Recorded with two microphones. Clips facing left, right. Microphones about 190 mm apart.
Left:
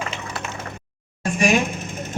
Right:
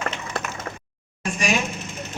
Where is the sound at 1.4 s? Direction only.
50° left (ahead or behind).